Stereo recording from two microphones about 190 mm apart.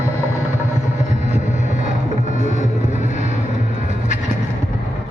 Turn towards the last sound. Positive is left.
turn(degrees=40)  # may be behind; listen again after turning